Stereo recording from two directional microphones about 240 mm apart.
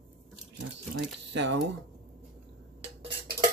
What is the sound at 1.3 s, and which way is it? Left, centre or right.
Speech, right.